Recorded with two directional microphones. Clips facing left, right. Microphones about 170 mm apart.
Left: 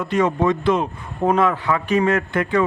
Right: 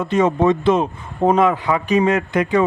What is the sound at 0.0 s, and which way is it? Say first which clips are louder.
A man's voice: right 3 dB; 25° right (ahead or behind).